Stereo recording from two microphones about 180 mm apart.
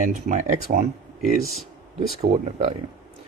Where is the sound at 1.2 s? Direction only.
Centre (ahead or behind).